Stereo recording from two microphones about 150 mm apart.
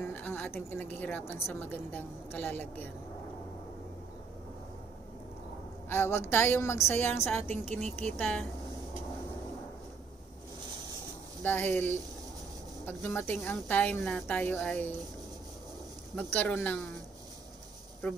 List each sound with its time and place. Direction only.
0.0 s a woman's voice: 10° left (ahead or behind)
5.9 s a woman's voice: 15° left (ahead or behind)
7.5 s speech: 50° right (ahead or behind)
8.0 s a woman's voice: 10° left (ahead or behind)
11.4 s a woman's voice: 10° left (ahead or behind)
16.2 s a woman's voice: 10° left (ahead or behind)
18.0 s a woman's voice: 10° left (ahead or behind)